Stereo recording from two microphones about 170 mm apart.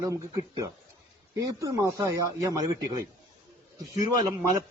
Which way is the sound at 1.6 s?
20° right (ahead or behind).